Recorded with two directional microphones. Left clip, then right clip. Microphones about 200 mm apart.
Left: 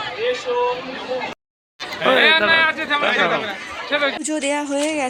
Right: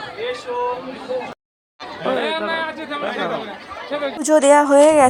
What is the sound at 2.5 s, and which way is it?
Speech, 10° right (ahead or behind).